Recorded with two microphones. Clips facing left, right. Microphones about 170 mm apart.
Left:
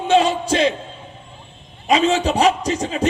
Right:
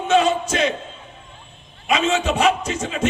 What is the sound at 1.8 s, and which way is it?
A man's voice, 35° left (ahead or behind).